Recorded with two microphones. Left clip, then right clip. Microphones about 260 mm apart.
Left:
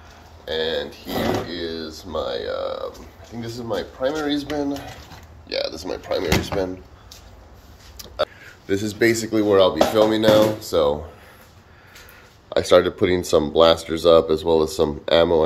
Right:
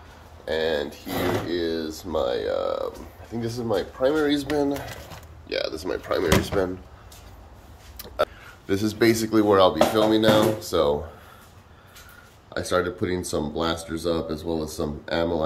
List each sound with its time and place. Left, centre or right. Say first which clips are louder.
0.5 s a sound: left 1 dB; centre
1.5 s speech: right 2 dB; centre
5.5 s speech: left 1 dB; centre
8.0 s a sound: left 1 dB; centre
9.3 s speech: left 1 dB; centre
12.5 s speech: left 9 dB; centre